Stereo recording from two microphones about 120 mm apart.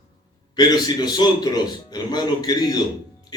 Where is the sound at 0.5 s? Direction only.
35° left (ahead or behind).